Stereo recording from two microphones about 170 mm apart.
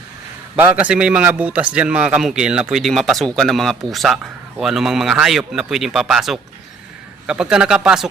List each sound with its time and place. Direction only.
0.5 s a man's voice: 10° right (ahead or behind)